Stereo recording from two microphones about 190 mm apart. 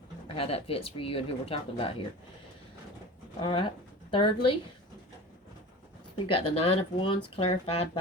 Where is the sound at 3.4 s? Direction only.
25° left (ahead or behind).